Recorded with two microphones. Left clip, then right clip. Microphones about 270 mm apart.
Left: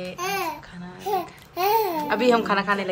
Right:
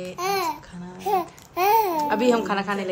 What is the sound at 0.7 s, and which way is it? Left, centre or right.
Babbling, centre.